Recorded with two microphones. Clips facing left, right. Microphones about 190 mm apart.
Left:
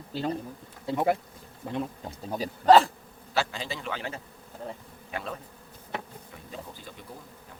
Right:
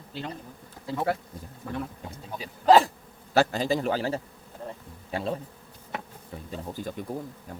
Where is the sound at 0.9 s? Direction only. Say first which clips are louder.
Left 2 dB; 20° left (ahead or behind).